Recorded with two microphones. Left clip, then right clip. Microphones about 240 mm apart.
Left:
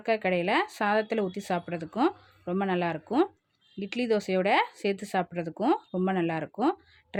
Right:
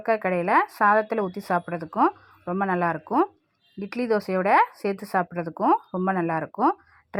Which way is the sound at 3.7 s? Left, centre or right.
Right.